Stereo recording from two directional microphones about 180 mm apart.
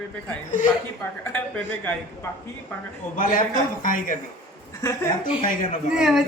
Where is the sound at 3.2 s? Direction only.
45° left (ahead or behind).